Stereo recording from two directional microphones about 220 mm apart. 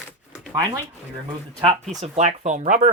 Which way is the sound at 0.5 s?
15° right (ahead or behind).